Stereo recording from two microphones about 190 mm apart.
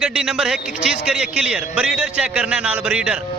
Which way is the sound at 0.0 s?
5° right (ahead or behind).